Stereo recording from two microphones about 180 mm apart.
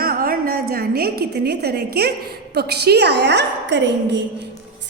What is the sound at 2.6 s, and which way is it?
A woman's voice, 65° right (ahead or behind).